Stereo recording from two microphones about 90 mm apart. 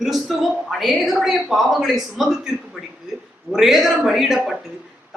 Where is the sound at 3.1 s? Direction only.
5° right (ahead or behind).